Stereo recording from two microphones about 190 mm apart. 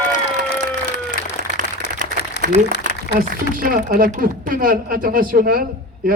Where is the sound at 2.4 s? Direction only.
65° left (ahead or behind).